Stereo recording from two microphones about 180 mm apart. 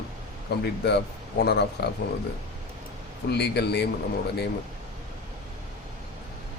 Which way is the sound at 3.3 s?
65° left (ahead or behind).